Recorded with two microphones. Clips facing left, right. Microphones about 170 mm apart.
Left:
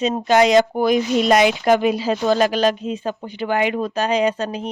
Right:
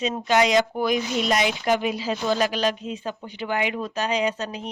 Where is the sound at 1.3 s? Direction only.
75° left (ahead or behind); by 4.6 s 55° left (ahead or behind).